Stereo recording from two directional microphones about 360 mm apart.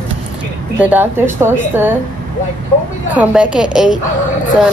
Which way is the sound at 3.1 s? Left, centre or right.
Centre.